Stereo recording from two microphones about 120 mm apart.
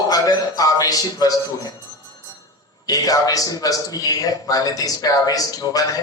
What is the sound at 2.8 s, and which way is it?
A man's voice, 30° left (ahead or behind).